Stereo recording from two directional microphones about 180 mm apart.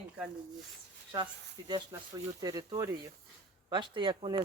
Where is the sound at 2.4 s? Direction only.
20° right (ahead or behind).